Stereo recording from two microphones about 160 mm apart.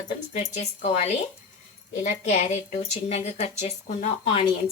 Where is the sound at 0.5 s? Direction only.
45° left (ahead or behind).